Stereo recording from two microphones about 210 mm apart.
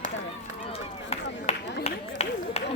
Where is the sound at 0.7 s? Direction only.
30° left (ahead or behind).